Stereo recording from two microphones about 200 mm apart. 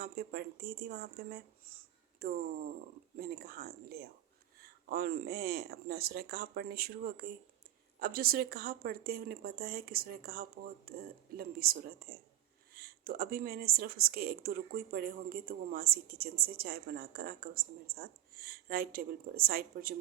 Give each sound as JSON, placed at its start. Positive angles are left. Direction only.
{"t": 0.0, "sound": "speech", "side_deg": -50}